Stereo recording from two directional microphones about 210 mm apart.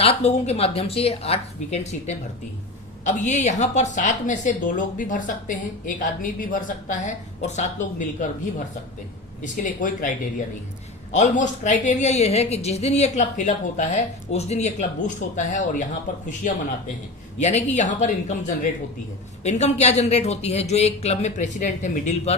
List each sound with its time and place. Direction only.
0.0 s a woman's voice: 30° left (ahead or behind)
9.4 s a woman's voice: 40° left (ahead or behind)
11.1 s a woman's voice: 35° left (ahead or behind)
17.4 s a woman's voice: 35° left (ahead or behind)